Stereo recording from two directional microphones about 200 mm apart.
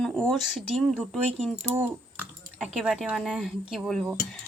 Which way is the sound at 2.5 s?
5° right (ahead or behind).